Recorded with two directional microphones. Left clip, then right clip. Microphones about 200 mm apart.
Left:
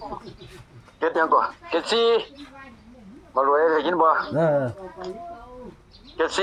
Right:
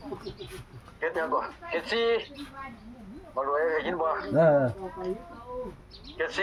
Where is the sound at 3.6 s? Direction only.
40° left (ahead or behind).